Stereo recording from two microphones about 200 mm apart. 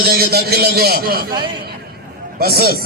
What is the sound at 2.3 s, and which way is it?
Speech, 50° right (ahead or behind).